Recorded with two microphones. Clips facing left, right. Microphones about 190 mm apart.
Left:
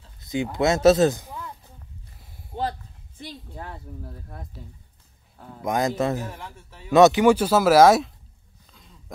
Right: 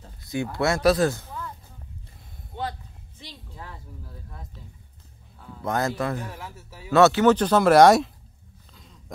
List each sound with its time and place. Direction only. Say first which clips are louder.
0.2 s speech: left 2 dB; 20° left (ahead or behind)
3.2 s speech: left 6 dB; 50° left (ahead or behind)
5.6 s speech: left 2 dB; 15° left (ahead or behind)
6.1 s speech: left 2 dB; centre (ahead or behind)
6.9 s speech: left 2 dB; 15° left (ahead or behind); by 8.1 s centre (ahead or behind)